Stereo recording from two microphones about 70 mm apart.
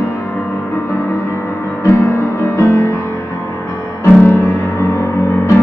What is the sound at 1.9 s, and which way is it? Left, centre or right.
Music, left.